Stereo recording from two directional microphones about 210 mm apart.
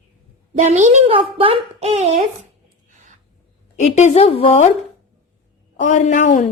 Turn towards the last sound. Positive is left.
turn(degrees=35)  # may be behind; listen again after turning